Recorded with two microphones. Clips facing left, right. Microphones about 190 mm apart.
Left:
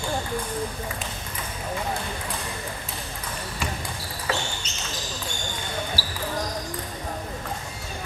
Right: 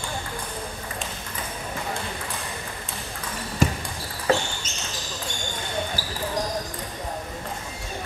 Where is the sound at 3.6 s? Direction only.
45° right (ahead or behind).